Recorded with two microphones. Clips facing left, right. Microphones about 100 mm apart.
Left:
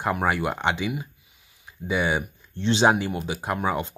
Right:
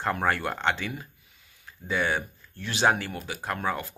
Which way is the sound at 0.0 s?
10° left (ahead or behind).